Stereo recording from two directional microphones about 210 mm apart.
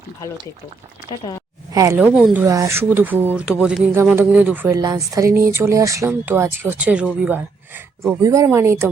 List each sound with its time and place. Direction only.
1.1 s speech: 15° right (ahead or behind)
2.1 s speech: 5° right (ahead or behind)